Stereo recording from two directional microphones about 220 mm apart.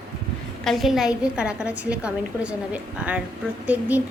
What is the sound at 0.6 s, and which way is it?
A woman's voice, centre (ahead or behind).